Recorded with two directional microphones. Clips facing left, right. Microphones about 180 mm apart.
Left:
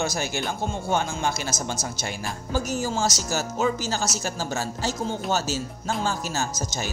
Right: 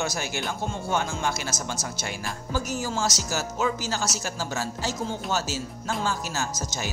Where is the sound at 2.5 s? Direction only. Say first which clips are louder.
Left 3 dB; 25° left (ahead or behind).